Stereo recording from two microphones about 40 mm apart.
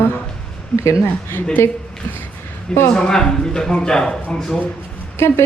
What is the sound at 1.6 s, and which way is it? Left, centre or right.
Speech, left.